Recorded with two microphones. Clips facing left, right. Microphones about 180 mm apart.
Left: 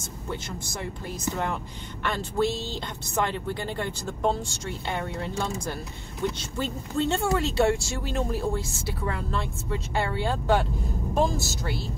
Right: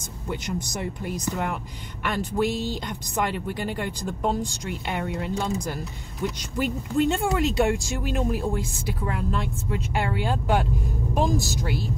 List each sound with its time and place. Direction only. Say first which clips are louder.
0.3 s speech: right 5 dB; 15° right (ahead or behind)